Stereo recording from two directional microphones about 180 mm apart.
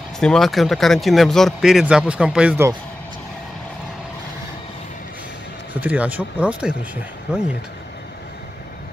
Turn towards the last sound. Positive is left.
turn(degrees=-5)  # may be behind; listen again after turning